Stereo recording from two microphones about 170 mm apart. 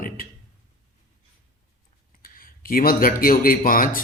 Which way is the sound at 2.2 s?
55° left (ahead or behind).